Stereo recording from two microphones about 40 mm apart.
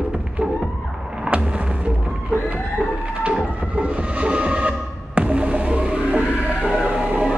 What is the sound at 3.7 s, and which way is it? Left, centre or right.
Music, right.